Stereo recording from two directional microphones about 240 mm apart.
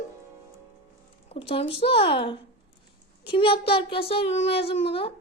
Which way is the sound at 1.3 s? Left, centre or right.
Left.